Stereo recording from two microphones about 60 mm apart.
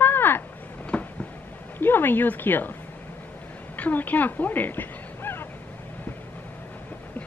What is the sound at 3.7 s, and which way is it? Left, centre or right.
Speech, left.